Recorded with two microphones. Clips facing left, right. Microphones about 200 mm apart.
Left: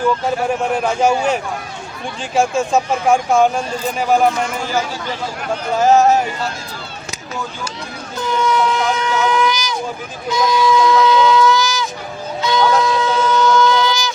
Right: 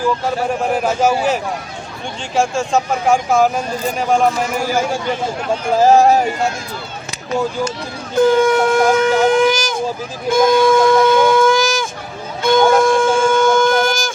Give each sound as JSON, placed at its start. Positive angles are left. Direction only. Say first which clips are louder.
{"t": 0.8, "sound": "speech", "louder": "right 1 dB", "side_deg": -5}
{"t": 5.7, "sound": "speech", "louder": "right 1 dB", "side_deg": -35}
{"t": 8.1, "sound": "shofar", "louder": "right 7 dB", "side_deg": -55}